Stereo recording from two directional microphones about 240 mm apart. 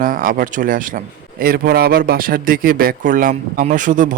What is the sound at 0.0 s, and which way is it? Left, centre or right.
Speech, right.